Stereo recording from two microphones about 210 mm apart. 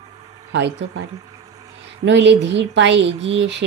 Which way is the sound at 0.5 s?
55° right (ahead or behind).